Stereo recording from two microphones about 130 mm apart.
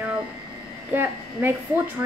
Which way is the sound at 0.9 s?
15° right (ahead or behind).